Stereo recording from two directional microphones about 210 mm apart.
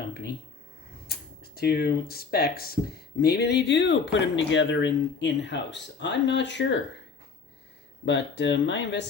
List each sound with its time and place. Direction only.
1.0 s speech: 45° left (ahead or behind)
8.0 s speech: 55° left (ahead or behind)